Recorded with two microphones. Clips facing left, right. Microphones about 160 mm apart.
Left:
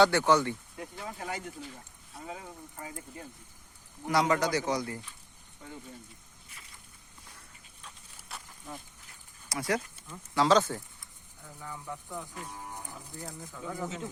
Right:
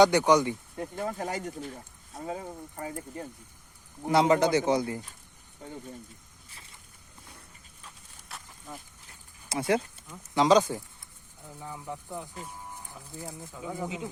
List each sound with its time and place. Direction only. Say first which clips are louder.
0.0 s speech: right 3 dB; 15° right (ahead or behind)
0.8 s speech: right 7 dB; 45° right (ahead or behind)
4.0 s speech: right 5 dB; 25° right (ahead or behind)
8.3 s a sound: even; centre (ahead or behind)
9.5 s speech: right 5 dB; 25° right (ahead or behind)